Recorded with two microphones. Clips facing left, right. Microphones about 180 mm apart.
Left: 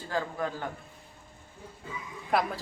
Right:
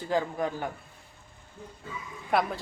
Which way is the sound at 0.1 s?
20° right (ahead or behind).